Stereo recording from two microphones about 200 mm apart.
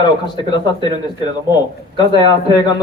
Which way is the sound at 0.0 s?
20° left (ahead or behind).